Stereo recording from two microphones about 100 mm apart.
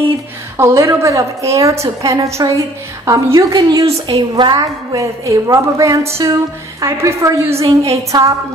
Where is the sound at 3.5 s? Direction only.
45° right (ahead or behind).